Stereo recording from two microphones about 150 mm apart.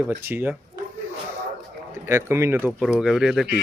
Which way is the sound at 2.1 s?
15° right (ahead or behind).